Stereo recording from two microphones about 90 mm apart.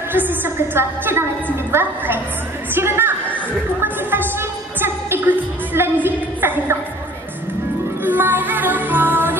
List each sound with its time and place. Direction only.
0.1 s a woman's voice: 20° right (ahead or behind)
3.8 s music: 25° right (ahead or behind)
6.0 s a sound: 25° right (ahead or behind)
8.0 s music: 25° right (ahead or behind)